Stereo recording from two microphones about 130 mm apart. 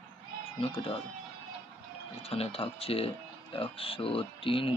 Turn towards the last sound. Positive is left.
turn(degrees=45)  # may be behind; listen again after turning